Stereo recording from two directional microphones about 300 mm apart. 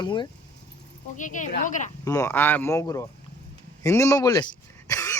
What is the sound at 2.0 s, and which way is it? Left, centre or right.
A man's voice, centre.